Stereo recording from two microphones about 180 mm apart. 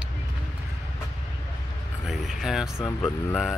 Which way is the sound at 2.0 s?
Centre (ahead or behind).